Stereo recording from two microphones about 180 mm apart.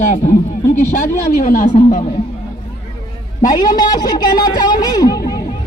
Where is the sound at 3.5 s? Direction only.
20° left (ahead or behind).